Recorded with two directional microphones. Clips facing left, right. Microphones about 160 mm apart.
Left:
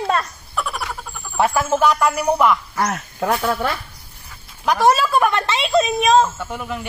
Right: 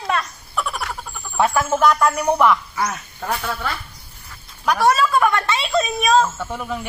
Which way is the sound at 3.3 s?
45° left (ahead or behind).